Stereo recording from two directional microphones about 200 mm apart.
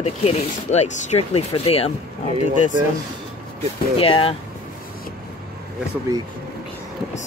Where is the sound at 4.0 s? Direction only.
30° left (ahead or behind).